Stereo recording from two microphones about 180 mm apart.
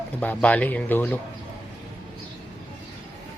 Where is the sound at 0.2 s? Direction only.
10° left (ahead or behind).